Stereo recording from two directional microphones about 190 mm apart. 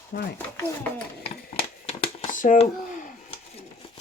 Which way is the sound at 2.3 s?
45° left (ahead or behind).